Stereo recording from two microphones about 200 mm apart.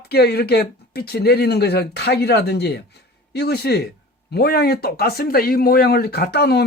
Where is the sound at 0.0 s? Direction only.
55° left (ahead or behind).